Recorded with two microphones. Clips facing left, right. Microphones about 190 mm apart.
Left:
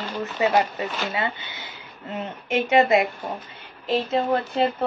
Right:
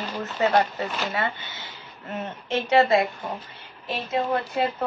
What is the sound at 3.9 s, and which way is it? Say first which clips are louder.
Speech: left 4 dB; 30° left (ahead or behind).